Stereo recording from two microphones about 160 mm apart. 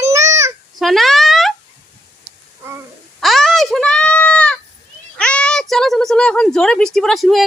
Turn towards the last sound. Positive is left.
turn(degrees=0)  # may be behind; listen again after turning